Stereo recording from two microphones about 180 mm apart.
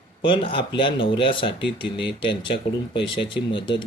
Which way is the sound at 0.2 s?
30° left (ahead or behind).